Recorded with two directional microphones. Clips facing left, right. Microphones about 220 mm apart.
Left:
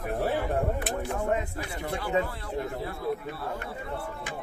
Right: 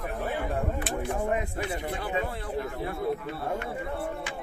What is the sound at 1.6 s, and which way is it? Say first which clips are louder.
Speech: right 2 dB; 20° right (ahead or behind).